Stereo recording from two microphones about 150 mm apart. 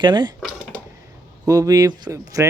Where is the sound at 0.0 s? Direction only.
30° right (ahead or behind).